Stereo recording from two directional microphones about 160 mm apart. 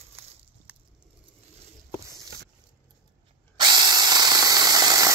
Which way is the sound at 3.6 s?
25° right (ahead or behind).